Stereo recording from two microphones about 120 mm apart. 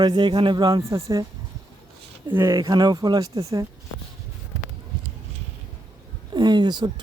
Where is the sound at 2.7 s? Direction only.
35° right (ahead or behind).